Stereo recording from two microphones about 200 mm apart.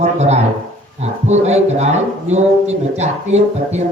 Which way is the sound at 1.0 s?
35° right (ahead or behind).